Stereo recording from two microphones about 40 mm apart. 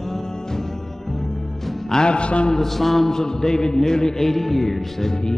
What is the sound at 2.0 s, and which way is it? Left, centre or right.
Speech, left.